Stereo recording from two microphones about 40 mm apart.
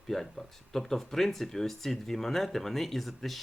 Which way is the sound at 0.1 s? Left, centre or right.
Centre.